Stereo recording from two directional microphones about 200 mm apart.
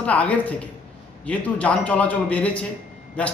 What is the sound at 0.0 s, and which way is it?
Speech, 5° left (ahead or behind).